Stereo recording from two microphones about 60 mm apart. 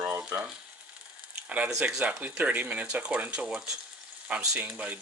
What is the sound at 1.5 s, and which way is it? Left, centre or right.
Speech, right.